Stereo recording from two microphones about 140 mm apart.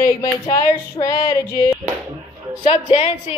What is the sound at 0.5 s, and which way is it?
Female singing, 25° left (ahead or behind).